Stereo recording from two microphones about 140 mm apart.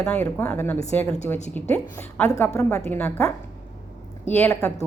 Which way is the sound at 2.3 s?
20° left (ahead or behind).